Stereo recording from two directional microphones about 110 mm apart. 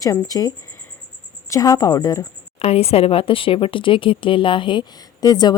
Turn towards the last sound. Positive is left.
turn(degrees=40)  # may be behind; listen again after turning